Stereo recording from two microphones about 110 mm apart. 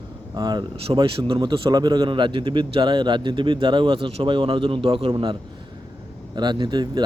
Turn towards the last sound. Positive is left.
turn(degrees=-40)  # may be behind; listen again after turning